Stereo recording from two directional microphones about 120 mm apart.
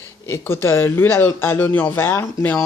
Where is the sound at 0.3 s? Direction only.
20° left (ahead or behind).